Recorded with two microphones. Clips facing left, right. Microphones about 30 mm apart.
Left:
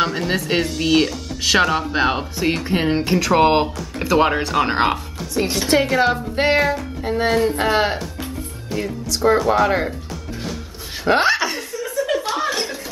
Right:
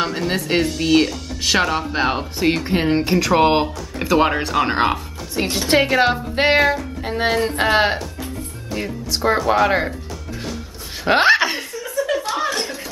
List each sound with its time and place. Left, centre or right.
0.0 s speech: centre
2.3 s speech: centre
5.7 s speech: right
6.3 s music: centre
7.6 s speech: centre
9.1 s speech: centre
11.1 s speech: right
11.7 s chuckle: centre